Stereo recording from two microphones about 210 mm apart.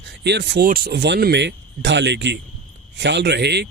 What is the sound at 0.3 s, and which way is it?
Speech, 55° right (ahead or behind).